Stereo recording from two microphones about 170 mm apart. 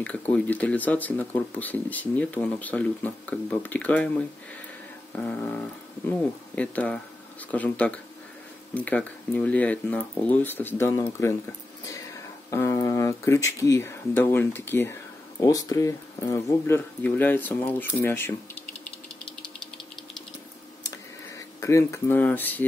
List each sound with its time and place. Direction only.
0.0 s speech: 10° left (ahead or behind)
5.1 s speech: 10° left (ahead or behind)
12.4 s speech: 20° left (ahead or behind)
21.5 s speech: 15° left (ahead or behind)